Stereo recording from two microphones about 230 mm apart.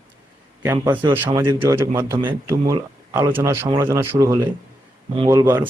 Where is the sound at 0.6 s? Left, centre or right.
Centre.